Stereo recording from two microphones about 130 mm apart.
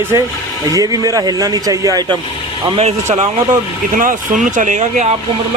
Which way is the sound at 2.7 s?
55° right (ahead or behind).